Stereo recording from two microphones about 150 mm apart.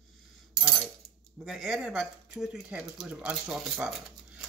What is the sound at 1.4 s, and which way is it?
Speech, 5° right (ahead or behind).